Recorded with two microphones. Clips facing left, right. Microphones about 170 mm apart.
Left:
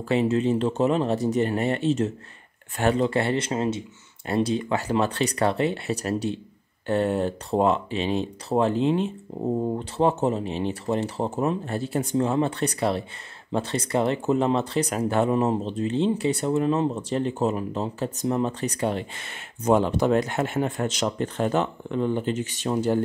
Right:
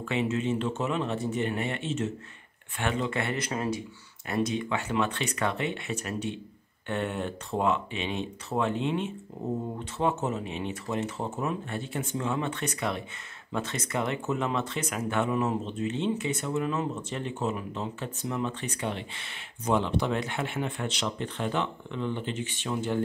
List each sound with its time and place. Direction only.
0.0 s speech: 35° left (ahead or behind)